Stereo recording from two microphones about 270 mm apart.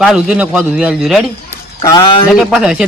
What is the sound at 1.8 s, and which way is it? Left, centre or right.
Speech, centre.